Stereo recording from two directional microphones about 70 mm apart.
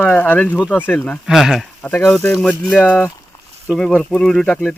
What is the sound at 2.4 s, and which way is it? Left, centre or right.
Speech, centre.